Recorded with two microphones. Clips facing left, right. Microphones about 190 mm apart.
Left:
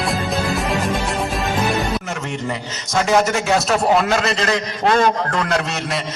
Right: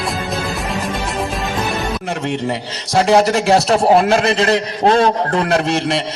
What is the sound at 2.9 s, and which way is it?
A man's voice, 35° right (ahead or behind).